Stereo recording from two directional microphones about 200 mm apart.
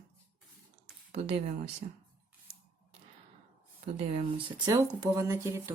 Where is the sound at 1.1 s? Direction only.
30° right (ahead or behind).